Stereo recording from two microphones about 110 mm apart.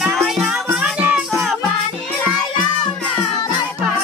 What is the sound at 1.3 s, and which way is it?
Music, centre (ahead or behind).